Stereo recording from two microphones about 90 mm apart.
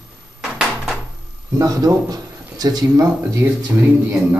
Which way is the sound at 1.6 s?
45° right (ahead or behind).